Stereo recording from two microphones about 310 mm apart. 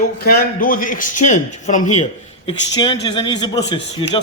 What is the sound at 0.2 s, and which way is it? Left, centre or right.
A man's voice, left.